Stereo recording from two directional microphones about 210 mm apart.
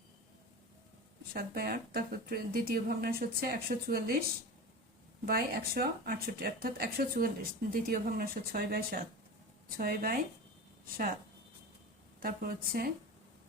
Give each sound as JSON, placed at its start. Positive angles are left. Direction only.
{"t": 1.3, "sound": "speech", "side_deg": -45}
{"t": 5.2, "sound": "speech", "side_deg": -45}
{"t": 12.2, "sound": "speech", "side_deg": -45}